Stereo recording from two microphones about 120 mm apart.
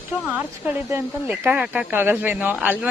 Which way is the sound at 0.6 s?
15° right (ahead or behind).